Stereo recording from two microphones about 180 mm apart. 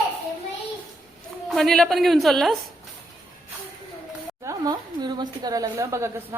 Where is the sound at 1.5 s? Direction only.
Centre (ahead or behind).